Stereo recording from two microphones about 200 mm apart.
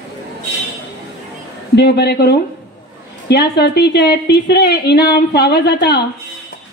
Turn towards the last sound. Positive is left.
turn(degrees=55)  # may be behind; listen again after turning